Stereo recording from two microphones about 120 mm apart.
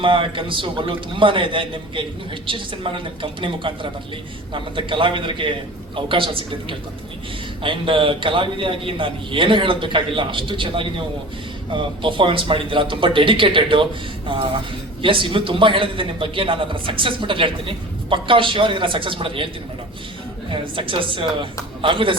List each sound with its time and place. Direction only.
0.0 s a man's voice: 45° right (ahead or behind)
20.5 s a man's voice: 45° right (ahead or behind)